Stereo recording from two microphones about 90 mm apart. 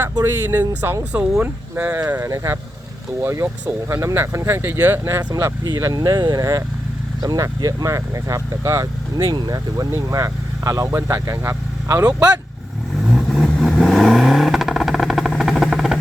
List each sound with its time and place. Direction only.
0.0 s speech: 30° right (ahead or behind)
2.0 s speech: 25° right (ahead or behind)
2.3 s speech: 35° right (ahead or behind)
5.8 s speech: 45° right (ahead or behind)
9.1 s speech: 55° right (ahead or behind)
9.7 s speech: 40° right (ahead or behind)
13.0 s vehicle: centre (ahead or behind)